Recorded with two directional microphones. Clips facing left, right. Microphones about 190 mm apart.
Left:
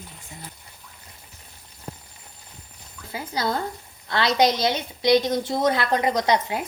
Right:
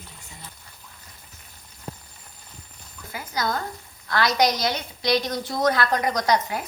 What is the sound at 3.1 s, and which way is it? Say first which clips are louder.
A woman's voice: left 1 dB; 30° left (ahead or behind).